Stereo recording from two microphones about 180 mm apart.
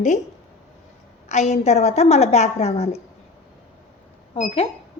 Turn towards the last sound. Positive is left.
turn(degrees=35)  # may be behind; listen again after turning